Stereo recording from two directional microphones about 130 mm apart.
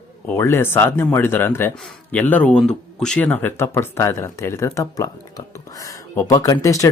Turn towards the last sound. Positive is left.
turn(degrees=25)  # may be behind; listen again after turning